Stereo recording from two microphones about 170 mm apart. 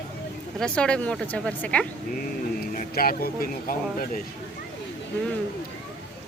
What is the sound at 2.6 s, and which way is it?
Speech, 55° left (ahead or behind).